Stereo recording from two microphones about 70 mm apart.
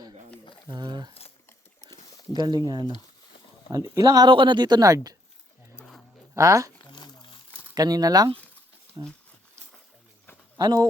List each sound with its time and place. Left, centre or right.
0.7 s boiling: right
2.3 s speech: right
3.7 s speech: right
6.3 s speech: right
7.8 s speech: right
10.6 s speech: right